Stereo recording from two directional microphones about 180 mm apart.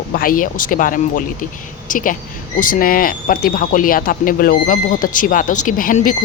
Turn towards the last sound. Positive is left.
turn(degrees=50)  # may be behind; listen again after turning